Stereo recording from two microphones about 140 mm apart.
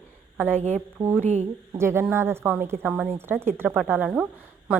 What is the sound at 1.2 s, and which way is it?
Speech, 50° right (ahead or behind).